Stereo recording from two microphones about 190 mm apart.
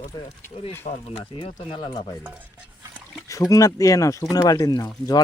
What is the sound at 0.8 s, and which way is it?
Speech, 30° left (ahead or behind).